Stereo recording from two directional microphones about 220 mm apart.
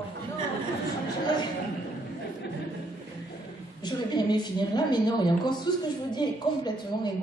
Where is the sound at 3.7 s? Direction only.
20° left (ahead or behind).